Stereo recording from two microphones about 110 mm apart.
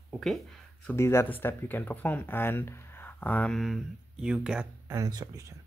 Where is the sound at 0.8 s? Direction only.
25° left (ahead or behind).